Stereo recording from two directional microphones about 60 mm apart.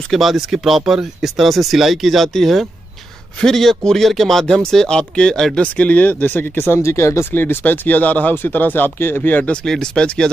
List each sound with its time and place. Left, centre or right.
0.1 s speech: centre
5.6 s speech: left
9.7 s speech: centre